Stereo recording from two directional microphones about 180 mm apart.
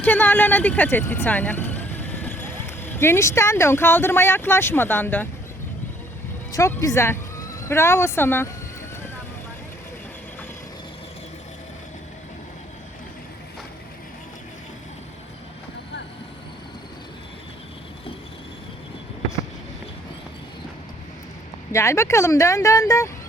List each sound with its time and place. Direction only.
0.0 s speech: 10° left (ahead or behind)
6.5 s speech: 15° left (ahead or behind)
21.7 s speech: 15° left (ahead or behind)